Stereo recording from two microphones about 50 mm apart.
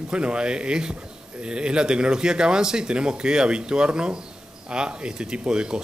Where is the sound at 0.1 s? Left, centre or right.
Right.